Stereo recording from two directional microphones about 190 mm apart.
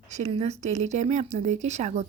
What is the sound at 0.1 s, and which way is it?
Speech, 35° right (ahead or behind).